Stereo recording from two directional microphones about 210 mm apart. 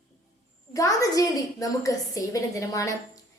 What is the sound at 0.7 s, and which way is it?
A woman's voice, 15° left (ahead or behind).